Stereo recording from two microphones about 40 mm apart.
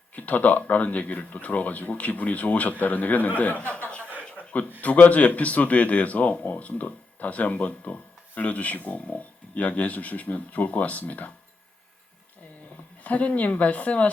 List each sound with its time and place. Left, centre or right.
0.1 s speech: left
4.8 s speech: left
13.0 s speech: left